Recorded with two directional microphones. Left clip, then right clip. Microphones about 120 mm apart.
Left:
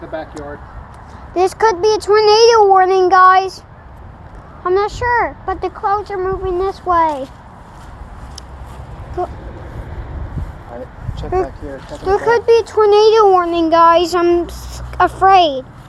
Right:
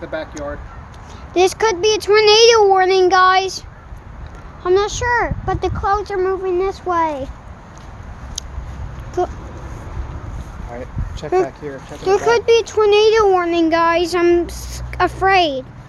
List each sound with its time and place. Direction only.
0.1 s a child's voice: 5° right (ahead or behind)
1.3 s speech: 25° right (ahead or behind)
1.5 s a child's voice: 5° right (ahead or behind)
2.0 s a child's voice: 10° right (ahead or behind)
4.6 s speech: 20° right (ahead or behind)
6.4 s a child's voice: 5° right (ahead or behind)
9.2 s speech: 45° right (ahead or behind)
11.3 s speech: 30° right (ahead or behind)
12.5 s a child's voice: 5° right (ahead or behind); by 14.2 s 10° left (ahead or behind)
14.2 s a child's voice: 5° right (ahead or behind)